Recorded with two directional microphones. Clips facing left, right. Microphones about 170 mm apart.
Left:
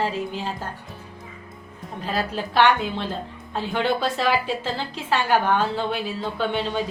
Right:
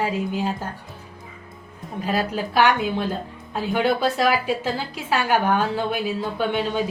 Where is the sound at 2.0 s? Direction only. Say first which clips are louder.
Right 3 dB; 10° right (ahead or behind).